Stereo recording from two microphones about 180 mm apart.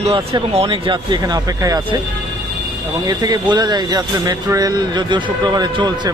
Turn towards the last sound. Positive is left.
turn(degrees=-25)  # may be behind; listen again after turning